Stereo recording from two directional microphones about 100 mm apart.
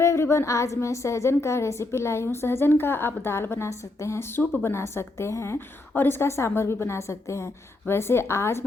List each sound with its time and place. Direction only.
0.0 s a woman's voice: 30° left (ahead or behind)